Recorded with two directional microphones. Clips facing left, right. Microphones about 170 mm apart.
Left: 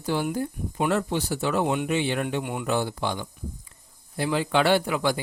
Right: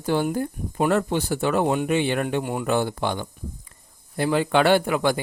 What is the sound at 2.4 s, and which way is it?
Speech, 45° right (ahead or behind).